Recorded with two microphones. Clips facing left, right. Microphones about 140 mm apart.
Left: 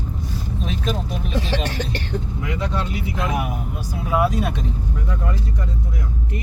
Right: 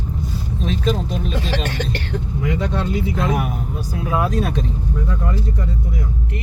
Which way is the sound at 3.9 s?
10° left (ahead or behind).